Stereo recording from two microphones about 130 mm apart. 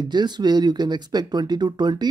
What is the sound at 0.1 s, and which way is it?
Speech, 35° right (ahead or behind).